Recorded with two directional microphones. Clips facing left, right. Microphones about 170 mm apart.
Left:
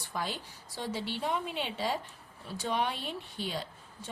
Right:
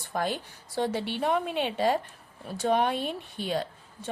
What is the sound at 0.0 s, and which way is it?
A woman's voice, 55° right (ahead or behind).